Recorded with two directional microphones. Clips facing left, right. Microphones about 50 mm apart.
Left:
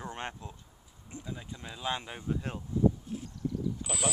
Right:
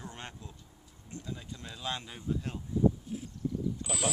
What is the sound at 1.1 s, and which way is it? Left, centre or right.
Speech, centre.